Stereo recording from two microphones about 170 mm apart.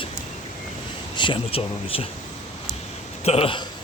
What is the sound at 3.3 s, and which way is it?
Speech, 35° left (ahead or behind).